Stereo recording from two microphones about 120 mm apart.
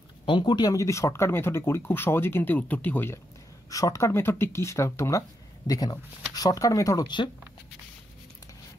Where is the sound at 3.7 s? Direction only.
30° left (ahead or behind).